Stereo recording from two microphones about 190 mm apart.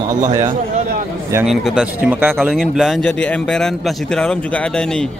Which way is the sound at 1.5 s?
5° right (ahead or behind).